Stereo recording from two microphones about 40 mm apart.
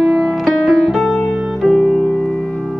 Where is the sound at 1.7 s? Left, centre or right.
Centre.